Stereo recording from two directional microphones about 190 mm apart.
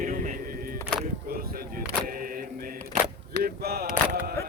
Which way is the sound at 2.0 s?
50° right (ahead or behind).